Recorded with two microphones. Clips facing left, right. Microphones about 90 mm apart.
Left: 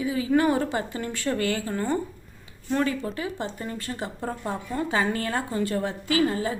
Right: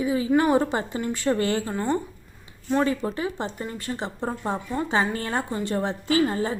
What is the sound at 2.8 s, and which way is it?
A woman's voice, 30° right (ahead or behind).